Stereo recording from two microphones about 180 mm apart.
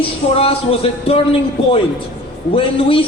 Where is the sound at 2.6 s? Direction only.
30° left (ahead or behind).